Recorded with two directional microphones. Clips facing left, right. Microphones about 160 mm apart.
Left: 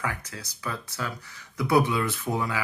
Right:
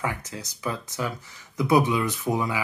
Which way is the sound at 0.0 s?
20° right (ahead or behind).